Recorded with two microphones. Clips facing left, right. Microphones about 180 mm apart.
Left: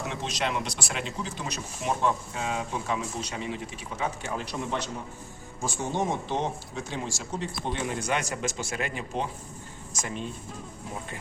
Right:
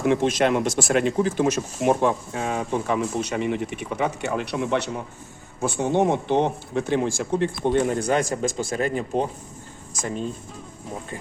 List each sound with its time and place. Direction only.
0.0 s speech: 55° right (ahead or behind)
7.9 s speech: 35° right (ahead or behind)